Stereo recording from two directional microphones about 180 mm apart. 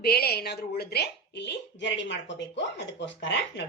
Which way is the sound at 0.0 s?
60° left (ahead or behind).